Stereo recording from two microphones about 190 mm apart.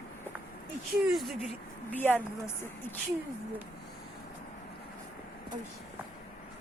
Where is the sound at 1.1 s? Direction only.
Centre (ahead or behind).